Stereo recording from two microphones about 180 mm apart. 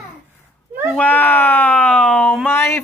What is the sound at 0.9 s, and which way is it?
Speech, 10° left (ahead or behind).